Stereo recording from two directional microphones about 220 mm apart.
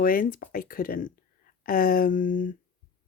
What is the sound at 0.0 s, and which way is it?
Speech, 40° left (ahead or behind).